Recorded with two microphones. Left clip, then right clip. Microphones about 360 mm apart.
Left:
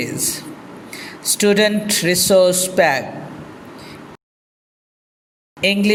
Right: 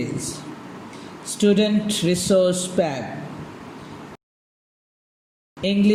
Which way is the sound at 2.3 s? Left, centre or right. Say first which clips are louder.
Left 5 dB; centre.